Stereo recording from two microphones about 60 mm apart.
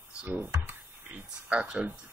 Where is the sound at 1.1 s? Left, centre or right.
Centre.